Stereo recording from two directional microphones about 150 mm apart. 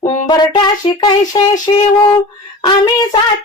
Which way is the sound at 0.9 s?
40° left (ahead or behind).